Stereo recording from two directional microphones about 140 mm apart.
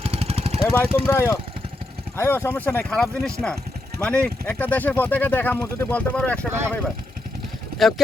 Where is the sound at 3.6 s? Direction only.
90° right.